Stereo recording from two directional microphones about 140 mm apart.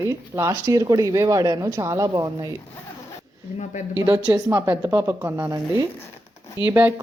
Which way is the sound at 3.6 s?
60° left (ahead or behind).